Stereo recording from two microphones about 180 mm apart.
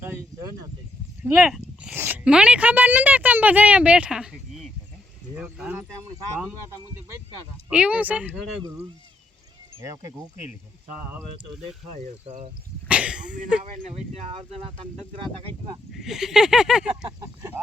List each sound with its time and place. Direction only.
0.0 s a sound: 15° right (ahead or behind)
1.2 s speech: 5° right (ahead or behind)
5.3 s a sound: 10° right (ahead or behind)
7.7 s speech: 5° right (ahead or behind)
11.9 s speech: 35° right (ahead or behind)
12.9 s speech: 5° right (ahead or behind)
13.9 s speech: 35° right (ahead or behind)
15.9 s speech: centre (ahead or behind)
16.8 s speech: 25° right (ahead or behind)